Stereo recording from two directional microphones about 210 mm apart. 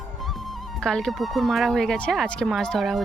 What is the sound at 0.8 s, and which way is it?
Speech, 5° left (ahead or behind).